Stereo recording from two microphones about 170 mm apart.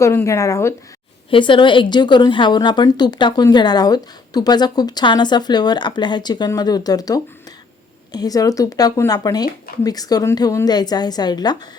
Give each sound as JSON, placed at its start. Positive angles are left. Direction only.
{"t": 0.0, "sound": "speech", "side_deg": 15}
{"t": 1.3, "sound": "a woman's voice", "side_deg": 30}